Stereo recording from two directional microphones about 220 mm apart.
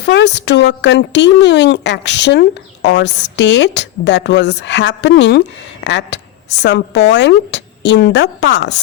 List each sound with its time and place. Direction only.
0.0 s a woman's voice: 50° left (ahead or behind)